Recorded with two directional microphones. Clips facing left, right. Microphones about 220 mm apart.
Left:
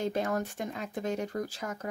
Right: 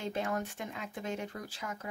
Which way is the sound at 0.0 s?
40° left (ahead or behind).